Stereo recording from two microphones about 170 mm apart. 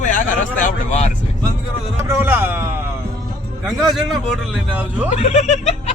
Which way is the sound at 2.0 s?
15° right (ahead or behind).